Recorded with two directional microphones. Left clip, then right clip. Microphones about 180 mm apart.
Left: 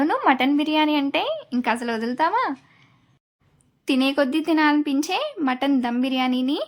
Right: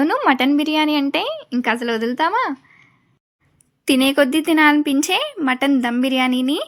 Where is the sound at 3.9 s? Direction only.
20° right (ahead or behind).